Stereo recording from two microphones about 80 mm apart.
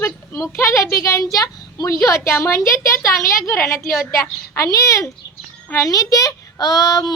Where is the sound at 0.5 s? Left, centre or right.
Left.